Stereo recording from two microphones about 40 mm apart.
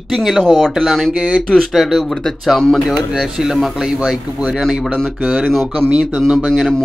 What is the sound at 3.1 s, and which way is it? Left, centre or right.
Speech, centre.